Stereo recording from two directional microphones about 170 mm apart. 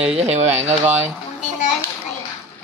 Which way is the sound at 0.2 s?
40° right (ahead or behind).